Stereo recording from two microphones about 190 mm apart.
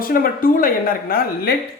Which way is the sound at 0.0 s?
50° left (ahead or behind).